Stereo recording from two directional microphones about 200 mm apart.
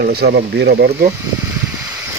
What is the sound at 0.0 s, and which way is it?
Speech, 50° right (ahead or behind).